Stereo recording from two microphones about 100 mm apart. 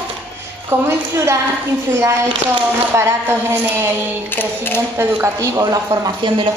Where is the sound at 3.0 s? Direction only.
25° right (ahead or behind).